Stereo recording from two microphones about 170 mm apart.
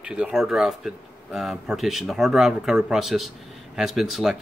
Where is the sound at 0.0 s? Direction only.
5° right (ahead or behind).